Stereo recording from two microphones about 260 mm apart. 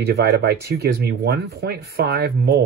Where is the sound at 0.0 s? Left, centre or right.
Right.